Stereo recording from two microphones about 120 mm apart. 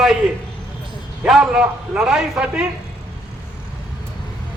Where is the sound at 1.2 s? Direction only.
5° right (ahead or behind).